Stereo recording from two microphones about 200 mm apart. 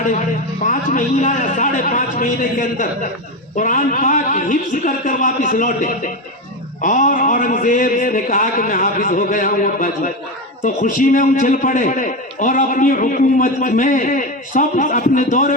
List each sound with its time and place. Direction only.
0.6 s a man's voice: 40° left (ahead or behind)